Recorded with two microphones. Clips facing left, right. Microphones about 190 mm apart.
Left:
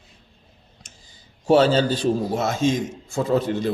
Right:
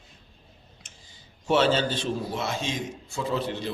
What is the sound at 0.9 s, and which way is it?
Clicking, 40° left (ahead or behind).